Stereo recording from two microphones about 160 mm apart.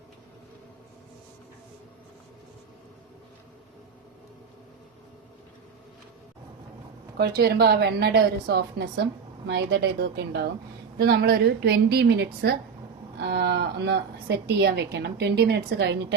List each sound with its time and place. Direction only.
7.2 s a woman's voice: 85° right
10.9 s a woman's voice: 75° right (ahead or behind); by 16.1 s 90° right